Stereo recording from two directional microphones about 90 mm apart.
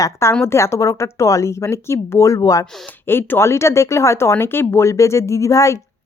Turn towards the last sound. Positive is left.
turn(degrees=35)  # may be behind; listen again after turning